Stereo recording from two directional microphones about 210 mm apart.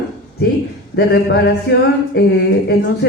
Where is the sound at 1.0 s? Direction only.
50° left (ahead or behind).